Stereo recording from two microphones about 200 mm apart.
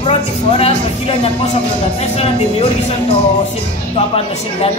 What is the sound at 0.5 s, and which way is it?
Speech, 30° left (ahead or behind).